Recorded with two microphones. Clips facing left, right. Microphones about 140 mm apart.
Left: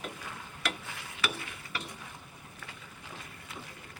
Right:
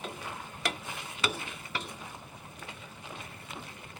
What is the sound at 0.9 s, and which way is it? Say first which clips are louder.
Stir: right 2 dB; 20° right (ahead or behind).